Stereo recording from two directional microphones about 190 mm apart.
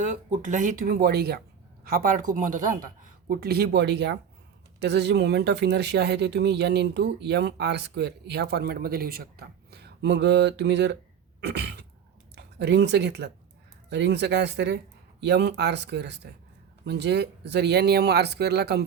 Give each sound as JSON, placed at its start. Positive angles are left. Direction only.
{"t": 0.0, "sound": "speech", "side_deg": -40}
{"t": 11.3, "sound": "throat clearing", "side_deg": -65}
{"t": 12.5, "sound": "speech", "side_deg": -65}